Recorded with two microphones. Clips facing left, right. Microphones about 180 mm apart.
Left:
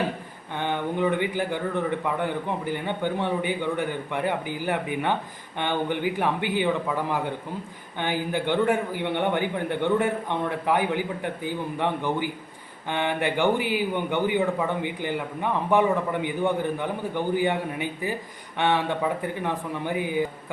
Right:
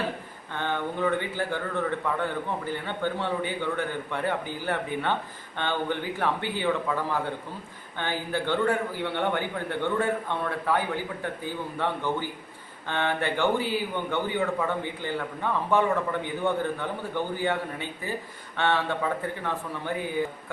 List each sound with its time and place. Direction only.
0.5 s a man's voice: 15° left (ahead or behind)